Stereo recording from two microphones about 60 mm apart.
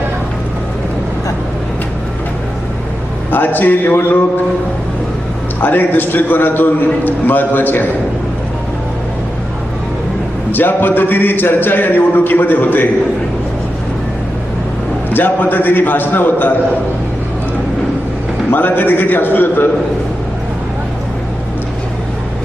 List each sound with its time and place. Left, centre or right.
3.3 s a man's voice: left
5.6 s a man's voice: left
10.5 s a man's voice: left
15.1 s a man's voice: left
18.5 s a man's voice: left